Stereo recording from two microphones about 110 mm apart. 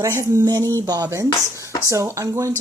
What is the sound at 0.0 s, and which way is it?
Speech, 25° right (ahead or behind).